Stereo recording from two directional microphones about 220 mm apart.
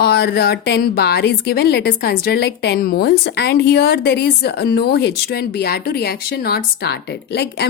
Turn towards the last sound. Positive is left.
turn(degrees=50)  # may be behind; listen again after turning